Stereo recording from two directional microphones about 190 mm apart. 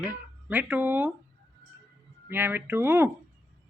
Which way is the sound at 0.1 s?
10° right (ahead or behind).